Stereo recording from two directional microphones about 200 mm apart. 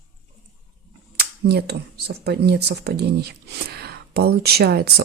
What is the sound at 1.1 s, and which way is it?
Speech, 55° right (ahead or behind).